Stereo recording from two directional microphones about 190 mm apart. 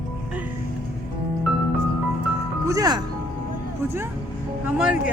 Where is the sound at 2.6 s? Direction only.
20° right (ahead or behind).